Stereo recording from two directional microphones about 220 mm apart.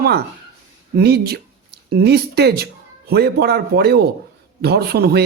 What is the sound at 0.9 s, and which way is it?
Speech, 45° right (ahead or behind).